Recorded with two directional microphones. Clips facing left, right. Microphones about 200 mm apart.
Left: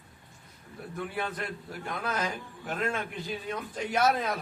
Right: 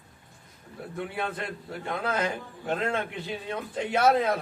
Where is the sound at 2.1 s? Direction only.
60° right (ahead or behind).